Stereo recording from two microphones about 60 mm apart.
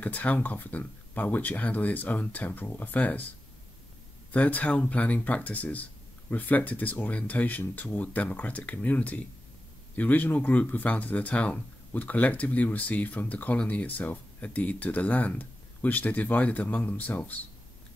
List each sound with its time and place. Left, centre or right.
0.0 s speech: left
4.3 s speech: left